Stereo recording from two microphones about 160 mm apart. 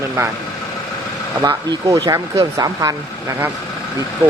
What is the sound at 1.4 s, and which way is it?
Speech, 25° right (ahead or behind).